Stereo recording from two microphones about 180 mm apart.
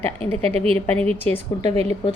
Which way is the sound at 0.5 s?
35° right (ahead or behind).